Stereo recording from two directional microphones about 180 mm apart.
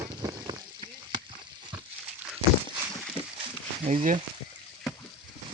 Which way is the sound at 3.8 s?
40° right (ahead or behind).